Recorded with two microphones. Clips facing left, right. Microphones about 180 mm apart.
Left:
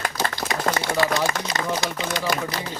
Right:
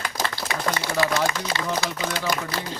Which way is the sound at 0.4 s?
40° left (ahead or behind).